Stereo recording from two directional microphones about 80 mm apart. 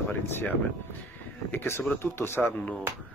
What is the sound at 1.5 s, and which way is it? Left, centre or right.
Speech, left.